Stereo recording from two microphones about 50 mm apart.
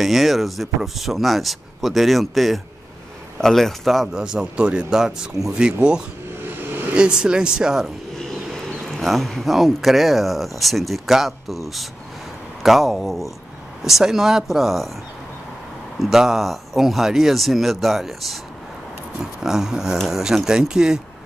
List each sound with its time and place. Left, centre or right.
0.0 s speech: centre
4.1 s speech: centre
6.4 s vehicle: right
6.9 s speech: centre
8.2 s a sound: centre
9.0 s speech: centre
16.0 s speech: centre
19.4 s speech: centre